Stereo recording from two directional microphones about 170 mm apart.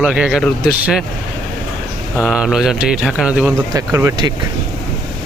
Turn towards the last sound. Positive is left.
turn(degrees=-20)  # may be behind; listen again after turning